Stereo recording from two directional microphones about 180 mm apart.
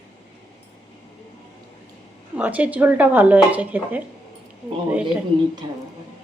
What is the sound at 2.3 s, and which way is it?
Speech, 10° right (ahead or behind).